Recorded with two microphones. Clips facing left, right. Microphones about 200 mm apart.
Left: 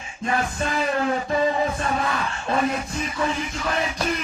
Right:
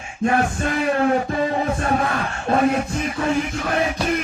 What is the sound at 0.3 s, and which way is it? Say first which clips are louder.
A man's voice: right 5 dB; 55° right (ahead or behind).